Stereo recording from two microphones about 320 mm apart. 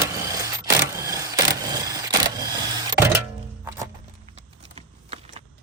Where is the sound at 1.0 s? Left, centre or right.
Centre.